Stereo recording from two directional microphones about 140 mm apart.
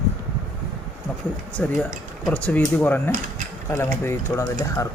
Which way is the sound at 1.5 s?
10° left (ahead or behind).